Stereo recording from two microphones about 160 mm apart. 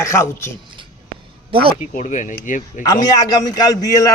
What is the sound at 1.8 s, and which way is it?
Speech, 50° left (ahead or behind).